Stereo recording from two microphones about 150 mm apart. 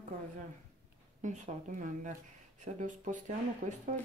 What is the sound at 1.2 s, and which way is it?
Speech, 55° right (ahead or behind).